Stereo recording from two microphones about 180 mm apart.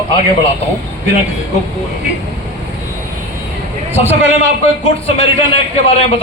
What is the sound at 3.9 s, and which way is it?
A man's voice, 35° left (ahead or behind).